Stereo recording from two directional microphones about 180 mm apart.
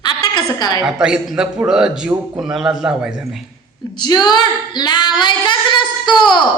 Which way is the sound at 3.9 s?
25° left (ahead or behind).